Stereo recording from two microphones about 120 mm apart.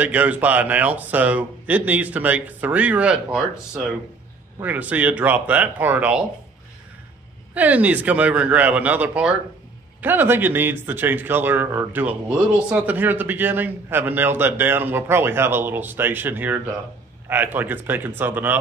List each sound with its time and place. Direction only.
0.0 s speech: 15° right (ahead or behind)
7.5 s speech: 10° right (ahead or behind)